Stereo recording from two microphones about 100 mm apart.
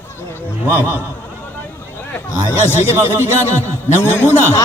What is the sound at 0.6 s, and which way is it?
Speech, 20° left (ahead or behind).